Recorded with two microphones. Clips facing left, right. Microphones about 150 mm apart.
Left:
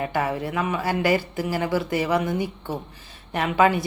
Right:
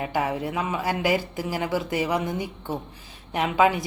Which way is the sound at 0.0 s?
10° right (ahead or behind).